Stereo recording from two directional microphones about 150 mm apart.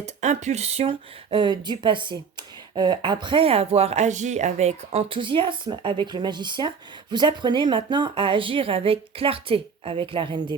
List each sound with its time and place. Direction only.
0.0 s speech: 50° right (ahead or behind); by 10.5 s 30° right (ahead or behind)